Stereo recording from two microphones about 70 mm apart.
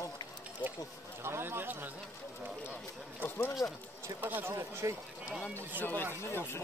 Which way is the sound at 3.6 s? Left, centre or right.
Left.